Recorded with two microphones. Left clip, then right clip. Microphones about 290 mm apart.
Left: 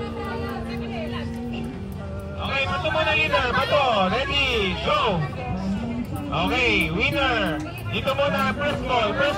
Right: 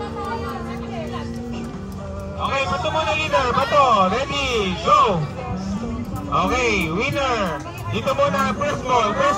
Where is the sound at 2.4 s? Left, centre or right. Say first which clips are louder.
Right 3 dB; centre.